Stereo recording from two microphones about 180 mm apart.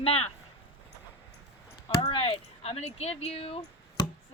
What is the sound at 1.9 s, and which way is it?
Speech, 30° left (ahead or behind).